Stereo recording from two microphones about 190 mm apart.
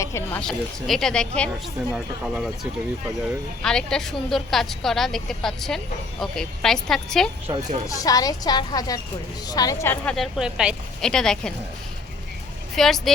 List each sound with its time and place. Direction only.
0.0 s a woman's voice: 15° left (ahead or behind); by 2.5 s 5° right (ahead or behind)
3.6 s a woman's voice: 5° left (ahead or behind)
7.4 s speech: 30° right (ahead or behind)
7.9 s a woman's voice: 20° left (ahead or behind); by 11.5 s 5° left (ahead or behind)
12.7 s speech: centre (ahead or behind)